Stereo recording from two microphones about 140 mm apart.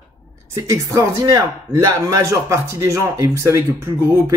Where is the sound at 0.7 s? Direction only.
20° right (ahead or behind).